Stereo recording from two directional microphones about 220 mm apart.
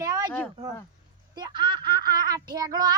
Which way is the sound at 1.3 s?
20° right (ahead or behind).